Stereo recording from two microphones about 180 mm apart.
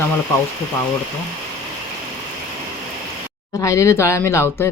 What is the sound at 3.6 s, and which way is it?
Speech, 15° left (ahead or behind).